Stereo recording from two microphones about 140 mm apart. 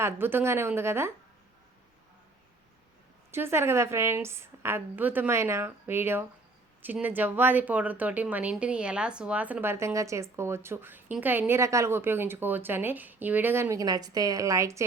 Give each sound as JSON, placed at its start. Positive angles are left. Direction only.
{"t": 0.0, "sound": "speech", "side_deg": -15}
{"t": 3.3, "sound": "speech", "side_deg": -15}